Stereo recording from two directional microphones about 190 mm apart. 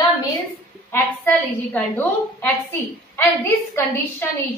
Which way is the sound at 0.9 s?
10° left (ahead or behind).